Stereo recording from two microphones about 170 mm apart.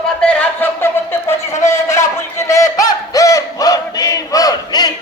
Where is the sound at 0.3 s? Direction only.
10° left (ahead or behind).